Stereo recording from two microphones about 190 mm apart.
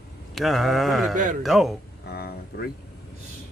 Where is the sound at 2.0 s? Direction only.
55° left (ahead or behind).